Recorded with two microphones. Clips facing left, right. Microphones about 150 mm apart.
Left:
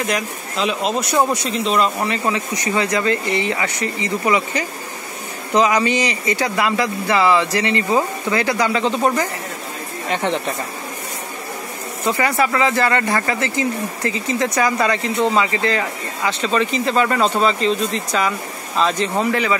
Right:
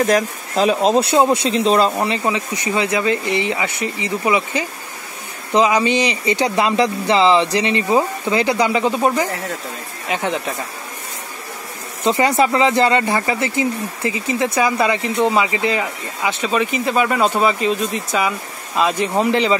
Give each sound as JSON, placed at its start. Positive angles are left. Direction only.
{"t": 0.0, "sound": "speech", "side_deg": -40}
{"t": 1.1, "sound": "speech", "side_deg": -25}
{"t": 2.0, "sound": "speech", "side_deg": -15}
{"t": 12.0, "sound": "speech", "side_deg": -20}